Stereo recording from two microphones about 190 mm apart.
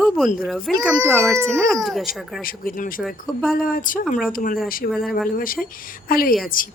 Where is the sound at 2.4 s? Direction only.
50° left (ahead or behind).